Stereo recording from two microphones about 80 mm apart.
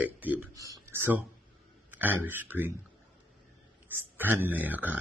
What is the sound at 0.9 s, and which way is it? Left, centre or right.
Speech, right.